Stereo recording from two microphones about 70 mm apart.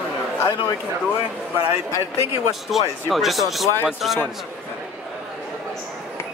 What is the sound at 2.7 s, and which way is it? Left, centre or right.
Speech, centre.